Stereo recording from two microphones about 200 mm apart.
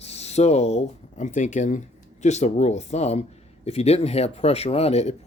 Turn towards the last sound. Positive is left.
turn(degrees=30)  # may be behind; listen again after turning